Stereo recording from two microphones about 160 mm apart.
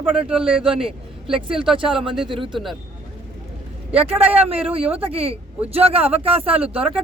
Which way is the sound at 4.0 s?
35° right (ahead or behind).